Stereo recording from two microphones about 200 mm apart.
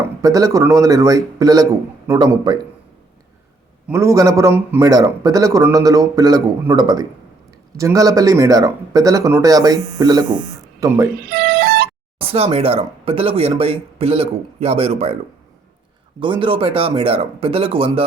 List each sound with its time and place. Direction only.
0.2 s speech: 15° right (ahead or behind)
3.8 s speech: 15° right (ahead or behind)
11.3 s music: 50° right (ahead or behind)
12.2 s speech: 30° right (ahead or behind)
16.2 s speech: 25° right (ahead or behind)